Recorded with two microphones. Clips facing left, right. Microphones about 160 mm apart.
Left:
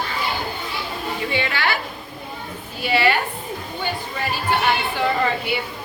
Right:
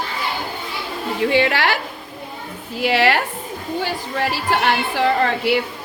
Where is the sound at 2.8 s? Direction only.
90° right.